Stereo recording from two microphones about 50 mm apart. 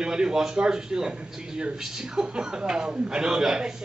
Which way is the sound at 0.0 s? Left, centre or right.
Centre.